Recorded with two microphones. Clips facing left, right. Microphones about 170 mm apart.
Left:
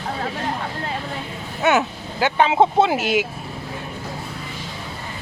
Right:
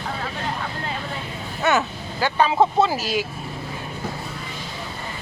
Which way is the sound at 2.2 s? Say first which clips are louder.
Left 2 dB; 20° left (ahead or behind).